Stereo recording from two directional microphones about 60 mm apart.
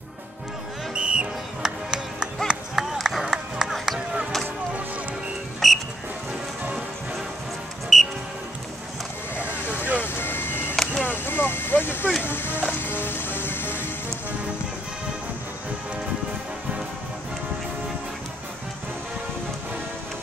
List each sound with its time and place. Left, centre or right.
0.9 s music: centre
2.4 s run: centre
5.6 s music: centre
7.9 s music: centre
10.0 s vehicle: left
11.1 s a sound: left
12.2 s music: left